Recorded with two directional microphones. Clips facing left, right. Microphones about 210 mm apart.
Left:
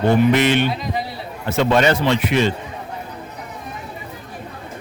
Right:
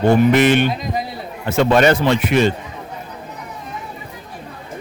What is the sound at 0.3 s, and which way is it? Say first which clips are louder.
Speech: right 3 dB; 50° right (ahead or behind).